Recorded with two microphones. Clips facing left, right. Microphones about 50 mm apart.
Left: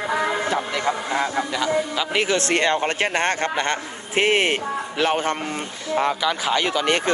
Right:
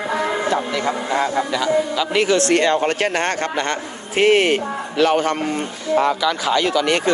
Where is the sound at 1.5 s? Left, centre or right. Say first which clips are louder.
Right 4 dB; centre.